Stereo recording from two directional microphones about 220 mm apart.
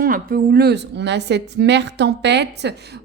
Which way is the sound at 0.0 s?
40° right (ahead or behind).